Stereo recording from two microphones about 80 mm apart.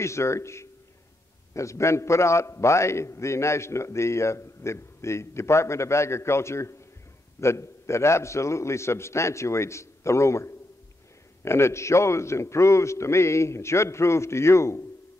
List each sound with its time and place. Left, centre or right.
0.0 s a man's voice: left